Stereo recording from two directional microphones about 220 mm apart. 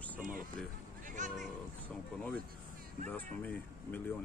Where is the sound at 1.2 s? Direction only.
35° right (ahead or behind).